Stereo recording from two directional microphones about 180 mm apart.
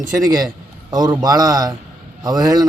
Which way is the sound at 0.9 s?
20° right (ahead or behind).